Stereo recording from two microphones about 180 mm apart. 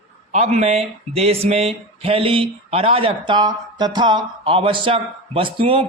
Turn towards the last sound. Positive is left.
turn(degrees=-30)  # may be behind; listen again after turning